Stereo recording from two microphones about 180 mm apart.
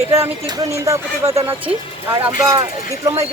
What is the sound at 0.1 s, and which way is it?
Speech, 20° right (ahead or behind).